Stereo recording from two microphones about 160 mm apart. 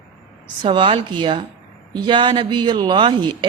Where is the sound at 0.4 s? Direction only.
30° right (ahead or behind).